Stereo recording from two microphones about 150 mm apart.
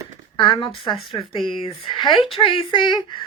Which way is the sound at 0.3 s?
35° left (ahead or behind).